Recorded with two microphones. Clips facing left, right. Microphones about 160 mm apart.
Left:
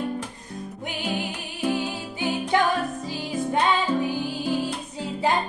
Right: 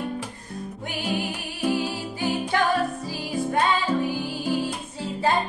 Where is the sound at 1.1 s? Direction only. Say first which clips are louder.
Right 1 dB; 20° left (ahead or behind).